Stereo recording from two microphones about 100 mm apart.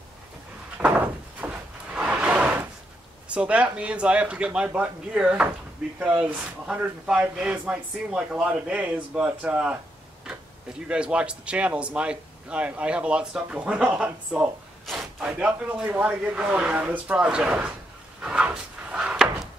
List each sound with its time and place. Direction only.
0.7 s door: 15° right (ahead or behind)
2.0 s a sound: 10° right (ahead or behind)
3.3 s speech: 15° right (ahead or behind)
10.9 s speech: 10° right (ahead or behind)
14.9 s a sound: 5° right (ahead or behind)
15.2 s speech: 15° right (ahead or behind)
18.2 s drawer open or close: 10° right (ahead or behind)